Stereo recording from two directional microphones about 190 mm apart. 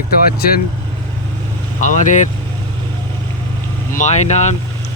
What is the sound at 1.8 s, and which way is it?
Speech, 40° left (ahead or behind).